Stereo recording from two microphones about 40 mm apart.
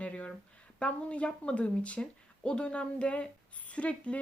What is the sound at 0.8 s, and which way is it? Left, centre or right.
Speech, left.